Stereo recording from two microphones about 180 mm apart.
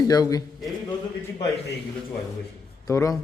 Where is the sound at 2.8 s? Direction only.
20° left (ahead or behind).